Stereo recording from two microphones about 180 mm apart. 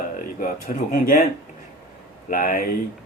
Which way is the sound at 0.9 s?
50° left (ahead or behind).